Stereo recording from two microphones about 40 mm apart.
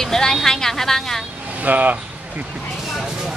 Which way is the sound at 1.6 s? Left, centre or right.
Right.